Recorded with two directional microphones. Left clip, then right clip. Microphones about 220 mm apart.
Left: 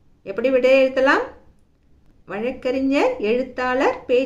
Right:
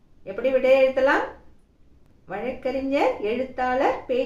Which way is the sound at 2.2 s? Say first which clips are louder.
Left 4 dB; 50° left (ahead or behind).